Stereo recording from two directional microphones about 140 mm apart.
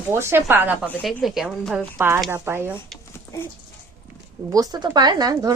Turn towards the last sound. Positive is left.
turn(degrees=-25)  # may be behind; listen again after turning